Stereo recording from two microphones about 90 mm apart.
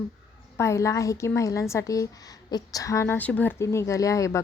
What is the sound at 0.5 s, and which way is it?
A woman's voice, 30° left (ahead or behind).